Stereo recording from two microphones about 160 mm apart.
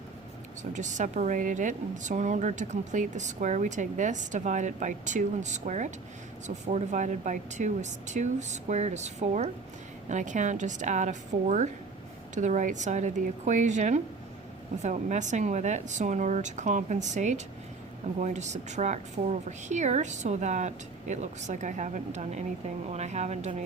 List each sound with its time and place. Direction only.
0.7 s a woman's voice: 50° right (ahead or behind)